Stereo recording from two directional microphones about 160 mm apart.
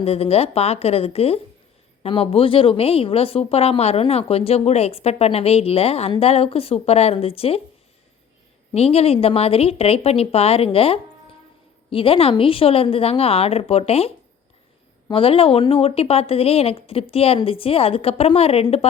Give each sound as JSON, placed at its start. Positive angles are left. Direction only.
{"t": 0.0, "sound": "speech", "side_deg": 40}
{"t": 8.7, "sound": "speech", "side_deg": 40}
{"t": 15.1, "sound": "speech", "side_deg": 35}